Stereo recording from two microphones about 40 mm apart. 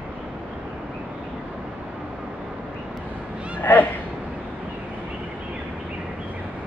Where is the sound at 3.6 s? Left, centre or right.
Left.